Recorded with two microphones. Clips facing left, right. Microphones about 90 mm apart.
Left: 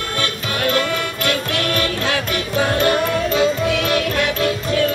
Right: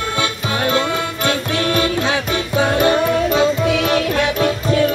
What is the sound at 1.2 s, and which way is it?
Music, 20° right (ahead or behind).